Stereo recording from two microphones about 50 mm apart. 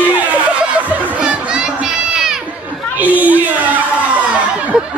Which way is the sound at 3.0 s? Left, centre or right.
Right.